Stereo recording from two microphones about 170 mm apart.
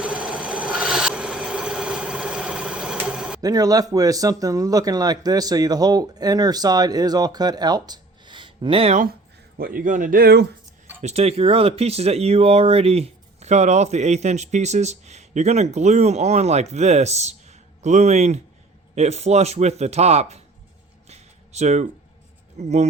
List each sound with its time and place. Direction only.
0.0 s filing: 5° right (ahead or behind)
3.4 s speech: 20° right (ahead or behind)
9.6 s speech: 55° right (ahead or behind)
11.0 s speech: 40° right (ahead or behind)
21.1 s a sound: 40° right (ahead or behind)
22.5 s speech: 40° right (ahead or behind)